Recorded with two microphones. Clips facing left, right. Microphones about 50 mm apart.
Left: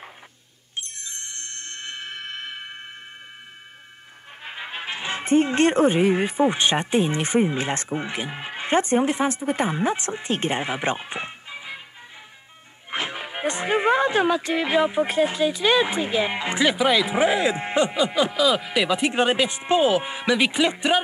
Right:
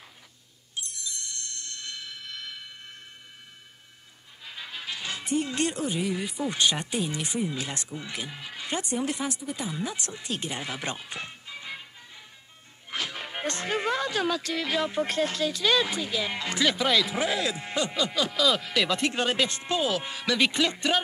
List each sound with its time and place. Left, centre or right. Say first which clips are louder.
0.7 s music: left 2 dB; left
4.4 s speech: left 6 dB; left
8.1 s speech: left 7 dB; left
12.9 s music: left 5 dB; left
13.2 s speech: left 5 dB; centre